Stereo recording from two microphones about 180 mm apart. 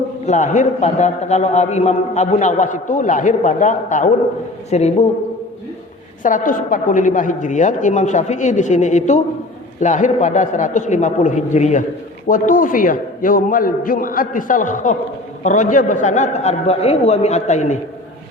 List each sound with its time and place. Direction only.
0.3 s a man's voice: 40° left (ahead or behind)
6.2 s a man's voice: 45° left (ahead or behind)